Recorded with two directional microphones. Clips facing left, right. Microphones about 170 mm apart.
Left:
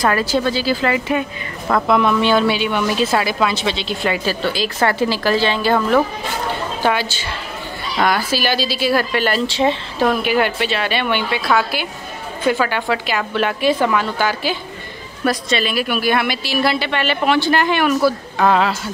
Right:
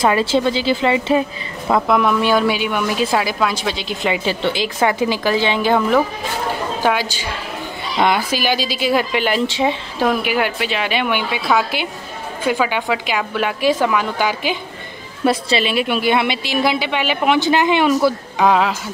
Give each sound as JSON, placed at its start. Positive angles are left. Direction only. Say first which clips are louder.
{"t": 0.0, "sound": "a woman's voice", "louder": "right 2 dB", "side_deg": -25}
{"t": 1.7, "sound": "speech", "louder": "even", "side_deg": -10}
{"t": 15.2, "sound": "a woman's voice", "louder": "right 2 dB", "side_deg": -25}
{"t": 18.4, "sound": "speech", "louder": "even", "side_deg": -5}